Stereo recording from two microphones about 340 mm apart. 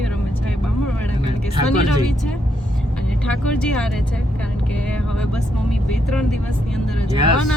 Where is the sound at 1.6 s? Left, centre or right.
Centre.